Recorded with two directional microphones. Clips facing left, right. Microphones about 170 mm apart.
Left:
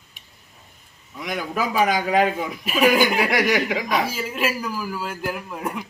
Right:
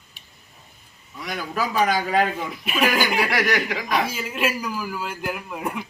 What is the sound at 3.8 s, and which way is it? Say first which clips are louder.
A man's voice: left 1 dB; 5° left (ahead or behind).